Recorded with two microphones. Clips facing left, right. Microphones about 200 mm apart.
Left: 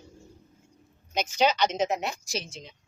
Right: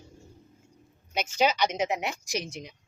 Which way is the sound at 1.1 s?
10° right (ahead or behind).